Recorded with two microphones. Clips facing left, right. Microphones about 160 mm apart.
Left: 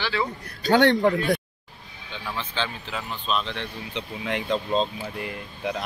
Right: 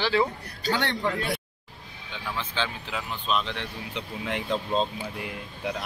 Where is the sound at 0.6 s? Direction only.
50° left (ahead or behind).